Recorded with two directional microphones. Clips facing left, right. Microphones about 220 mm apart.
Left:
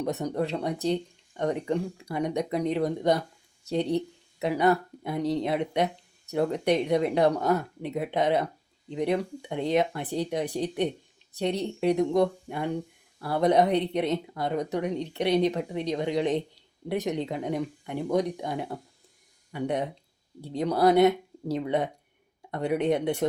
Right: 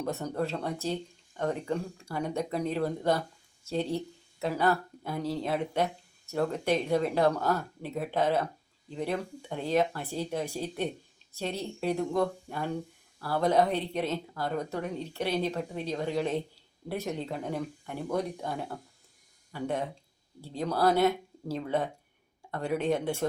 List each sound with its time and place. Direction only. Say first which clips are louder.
0.0 s speech: left 3 dB; 15° left (ahead or behind)
11.9 s speech: left 5 dB; 15° left (ahead or behind)